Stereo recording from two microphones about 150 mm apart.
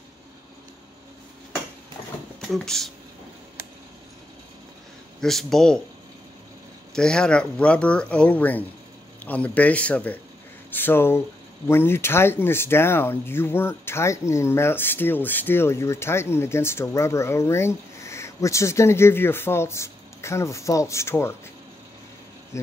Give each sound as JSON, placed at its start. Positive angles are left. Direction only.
{"t": 2.4, "sound": "speech", "side_deg": 0}
{"t": 5.2, "sound": "speech", "side_deg": 0}
{"t": 6.9, "sound": "speech", "side_deg": 5}